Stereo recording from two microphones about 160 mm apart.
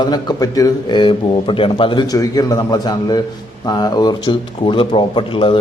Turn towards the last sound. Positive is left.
turn(degrees=30)  # may be behind; listen again after turning